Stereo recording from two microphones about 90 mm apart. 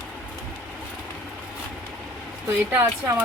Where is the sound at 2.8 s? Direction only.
25° right (ahead or behind).